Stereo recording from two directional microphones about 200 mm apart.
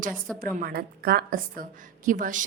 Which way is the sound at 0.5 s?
50° right (ahead or behind).